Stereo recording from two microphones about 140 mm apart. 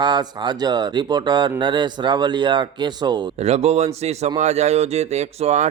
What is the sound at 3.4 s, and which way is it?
Speech, 50° right (ahead or behind).